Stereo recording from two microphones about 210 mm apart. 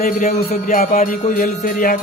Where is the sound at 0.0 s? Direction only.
40° left (ahead or behind).